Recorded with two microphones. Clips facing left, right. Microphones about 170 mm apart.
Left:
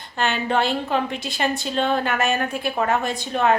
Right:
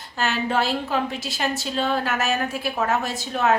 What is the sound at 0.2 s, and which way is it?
A woman's voice, 5° right (ahead or behind).